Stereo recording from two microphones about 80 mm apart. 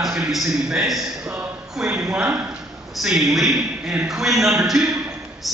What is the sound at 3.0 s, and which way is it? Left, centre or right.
A man's voice, centre.